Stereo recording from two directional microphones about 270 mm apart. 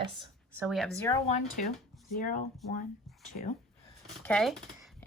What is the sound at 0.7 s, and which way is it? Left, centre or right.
Speech, centre.